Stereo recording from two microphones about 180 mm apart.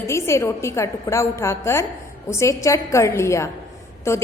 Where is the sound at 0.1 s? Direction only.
15° left (ahead or behind).